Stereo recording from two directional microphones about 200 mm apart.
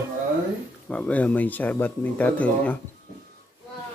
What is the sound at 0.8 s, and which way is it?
Speech, 5° left (ahead or behind).